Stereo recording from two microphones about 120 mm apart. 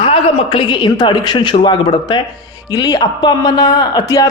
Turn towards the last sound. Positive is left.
turn(degrees=35)  # may be behind; listen again after turning